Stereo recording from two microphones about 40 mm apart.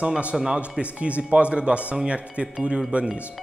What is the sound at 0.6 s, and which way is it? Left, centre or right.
A man's voice, right.